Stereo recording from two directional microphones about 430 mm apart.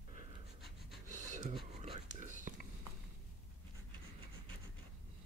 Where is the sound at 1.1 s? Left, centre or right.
Centre.